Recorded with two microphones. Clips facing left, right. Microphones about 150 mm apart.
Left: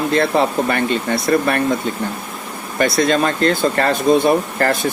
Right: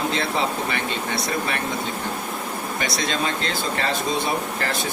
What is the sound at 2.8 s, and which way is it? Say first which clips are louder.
Speech: left 11 dB; 55° left (ahead or behind).